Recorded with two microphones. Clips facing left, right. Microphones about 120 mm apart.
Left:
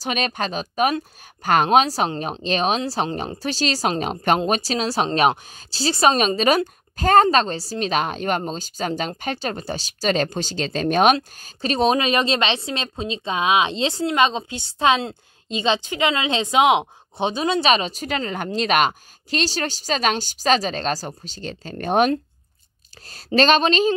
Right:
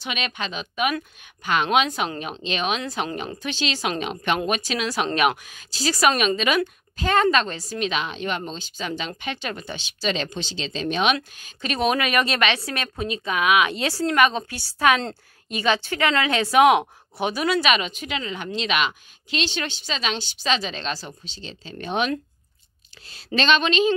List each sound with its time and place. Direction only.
0.0 s a woman's voice: 40° left (ahead or behind)
11.1 s a woman's voice: 35° left (ahead or behind)